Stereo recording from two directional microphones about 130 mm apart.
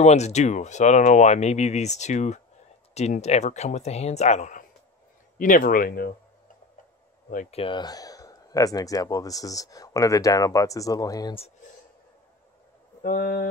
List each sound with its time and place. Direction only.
0.0 s speech: 60° left (ahead or behind)
5.4 s speech: 90° left
7.5 s speech: 45° left (ahead or behind)
7.8 s speech: 30° left (ahead or behind)
13.0 s speech: 90° left